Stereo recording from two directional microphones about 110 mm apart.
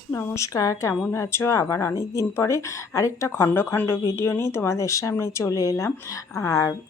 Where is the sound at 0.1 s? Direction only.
25° left (ahead or behind).